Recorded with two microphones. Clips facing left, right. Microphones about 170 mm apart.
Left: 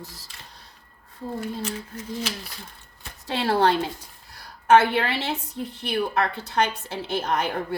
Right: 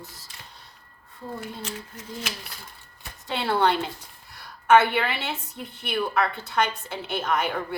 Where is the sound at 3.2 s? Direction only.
35° left (ahead or behind).